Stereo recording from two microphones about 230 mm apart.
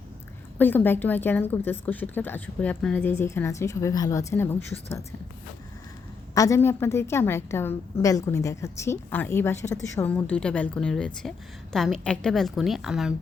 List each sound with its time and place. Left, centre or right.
0.6 s a woman's voice: centre
6.3 s a woman's voice: centre